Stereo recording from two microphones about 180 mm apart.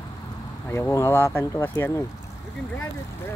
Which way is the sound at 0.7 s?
15° left (ahead or behind).